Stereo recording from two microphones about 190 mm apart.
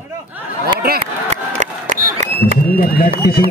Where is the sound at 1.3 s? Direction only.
40° right (ahead or behind).